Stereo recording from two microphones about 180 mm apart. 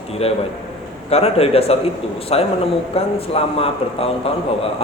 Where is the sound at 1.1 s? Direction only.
35° left (ahead or behind).